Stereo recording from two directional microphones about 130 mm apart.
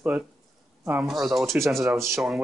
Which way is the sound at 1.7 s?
Centre (ahead or behind).